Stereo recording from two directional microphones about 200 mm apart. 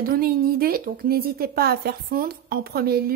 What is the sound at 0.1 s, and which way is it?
A woman's voice, 50° right (ahead or behind).